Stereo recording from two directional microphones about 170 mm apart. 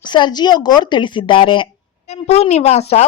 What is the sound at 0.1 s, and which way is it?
A woman's voice, 25° left (ahead or behind).